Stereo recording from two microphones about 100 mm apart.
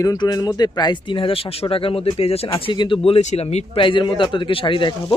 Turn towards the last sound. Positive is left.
turn(degrees=55)  # may be behind; listen again after turning